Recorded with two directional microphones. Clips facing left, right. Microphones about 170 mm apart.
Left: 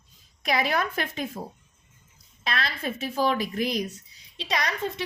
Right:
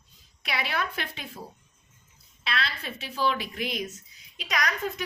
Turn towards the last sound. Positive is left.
turn(degrees=30)  # may be behind; listen again after turning